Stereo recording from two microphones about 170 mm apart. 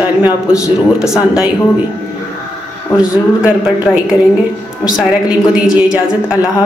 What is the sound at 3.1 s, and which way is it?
Speech, 5° right (ahead or behind).